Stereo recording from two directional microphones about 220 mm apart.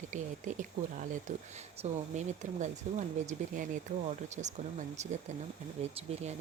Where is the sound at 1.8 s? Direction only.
30° right (ahead or behind).